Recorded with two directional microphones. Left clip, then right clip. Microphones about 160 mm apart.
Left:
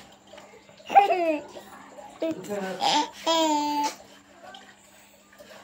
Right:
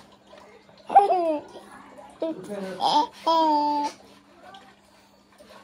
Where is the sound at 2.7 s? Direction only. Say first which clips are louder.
Right 3 dB; 10° right (ahead or behind).